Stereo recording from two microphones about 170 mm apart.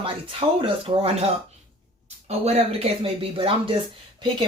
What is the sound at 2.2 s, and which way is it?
Speech, 35° right (ahead or behind).